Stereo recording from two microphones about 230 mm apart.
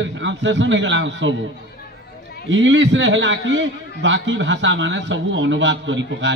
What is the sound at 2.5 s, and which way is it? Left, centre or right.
A man's voice, right.